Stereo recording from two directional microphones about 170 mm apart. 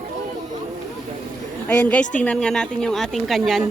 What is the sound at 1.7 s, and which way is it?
A woman's voice, 10° left (ahead or behind).